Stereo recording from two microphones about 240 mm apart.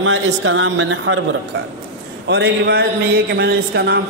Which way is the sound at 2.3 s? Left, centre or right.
Right.